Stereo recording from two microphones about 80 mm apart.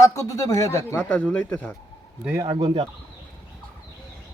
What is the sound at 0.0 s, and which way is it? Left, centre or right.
Speech, left.